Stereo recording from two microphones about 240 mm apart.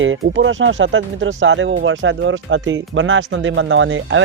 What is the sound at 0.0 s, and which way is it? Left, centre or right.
Speech, right.